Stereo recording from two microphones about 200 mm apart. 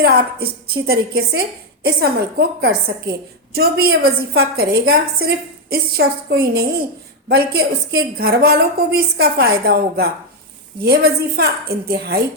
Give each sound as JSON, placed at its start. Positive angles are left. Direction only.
{"t": 0.0, "sound": "a woman's voice", "side_deg": -50}